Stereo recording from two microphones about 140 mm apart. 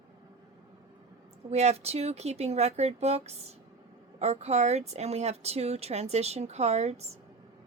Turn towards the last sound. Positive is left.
turn(degrees=-50)  # may be behind; listen again after turning